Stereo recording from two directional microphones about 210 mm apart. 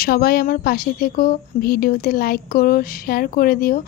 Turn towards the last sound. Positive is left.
turn(degrees=45)  # may be behind; listen again after turning